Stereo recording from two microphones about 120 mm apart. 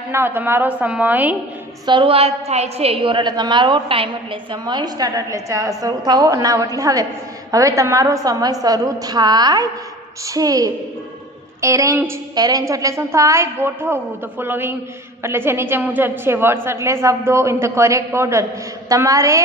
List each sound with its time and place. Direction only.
0.1 s a woman's voice: 15° right (ahead or behind)
1.9 s a woman's voice: 45° right (ahead or behind); by 19.4 s 25° right (ahead or behind)